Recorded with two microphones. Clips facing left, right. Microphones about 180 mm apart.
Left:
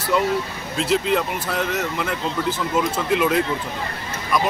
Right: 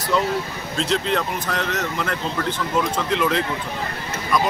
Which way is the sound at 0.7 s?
5° left (ahead or behind).